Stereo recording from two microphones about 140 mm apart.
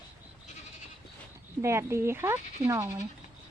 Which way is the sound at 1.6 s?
20° right (ahead or behind).